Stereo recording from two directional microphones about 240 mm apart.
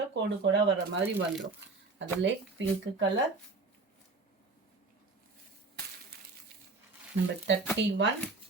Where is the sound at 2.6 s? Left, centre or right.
Right.